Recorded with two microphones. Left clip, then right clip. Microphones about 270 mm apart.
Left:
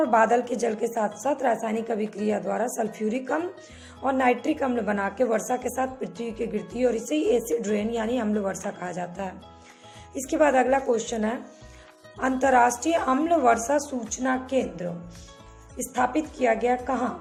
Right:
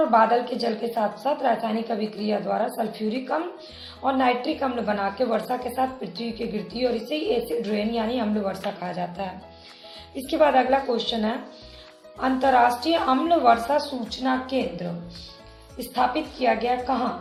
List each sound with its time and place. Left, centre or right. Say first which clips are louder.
0.1 s a woman's voice: right 1 dB; left
10.3 s a woman's voice: right 2 dB; left
12.2 s a woman's voice: right 1 dB; left
16.0 s a woman's voice: right 1 dB; left